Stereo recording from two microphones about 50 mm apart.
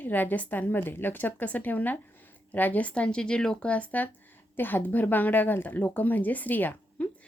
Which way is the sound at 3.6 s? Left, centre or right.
Left.